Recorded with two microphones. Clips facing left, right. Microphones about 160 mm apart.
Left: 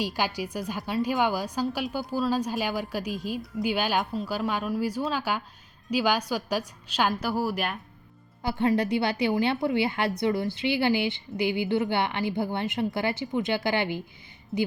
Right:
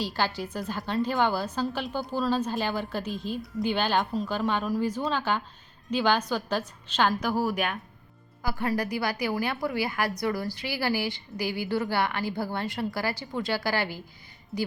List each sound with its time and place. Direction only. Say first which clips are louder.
0.0 s a woman's voice: left 1 dB; 15° left (ahead or behind)
8.4 s a woman's voice: left 4 dB; 25° left (ahead or behind)